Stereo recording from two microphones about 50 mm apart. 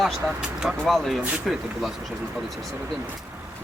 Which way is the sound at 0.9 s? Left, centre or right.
Centre.